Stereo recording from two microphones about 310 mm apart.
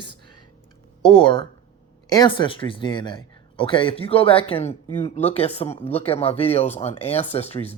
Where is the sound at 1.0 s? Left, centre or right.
Centre.